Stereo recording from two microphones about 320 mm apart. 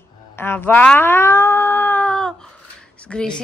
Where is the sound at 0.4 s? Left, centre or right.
Centre.